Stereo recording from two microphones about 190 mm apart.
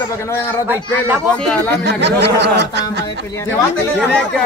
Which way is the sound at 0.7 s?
10° right (ahead or behind).